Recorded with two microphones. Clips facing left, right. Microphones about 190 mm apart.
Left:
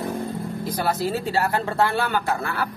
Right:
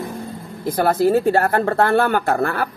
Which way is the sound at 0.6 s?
50° right (ahead or behind).